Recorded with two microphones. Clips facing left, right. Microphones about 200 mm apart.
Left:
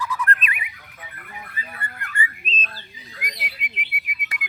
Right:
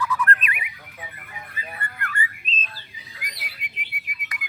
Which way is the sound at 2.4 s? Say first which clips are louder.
Left 3 dB; 65° left (ahead or behind).